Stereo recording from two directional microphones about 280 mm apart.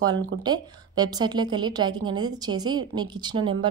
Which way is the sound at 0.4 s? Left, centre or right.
Centre.